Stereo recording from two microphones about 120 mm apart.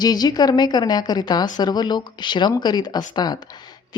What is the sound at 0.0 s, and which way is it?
A woman's voice, 35° left (ahead or behind).